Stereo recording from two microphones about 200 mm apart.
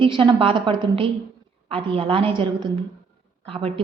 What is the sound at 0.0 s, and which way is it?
A woman's voice, 25° right (ahead or behind).